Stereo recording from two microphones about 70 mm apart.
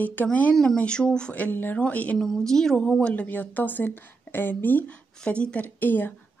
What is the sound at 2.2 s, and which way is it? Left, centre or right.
Speech, centre.